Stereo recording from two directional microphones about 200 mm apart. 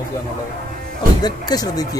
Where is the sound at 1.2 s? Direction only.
20° left (ahead or behind).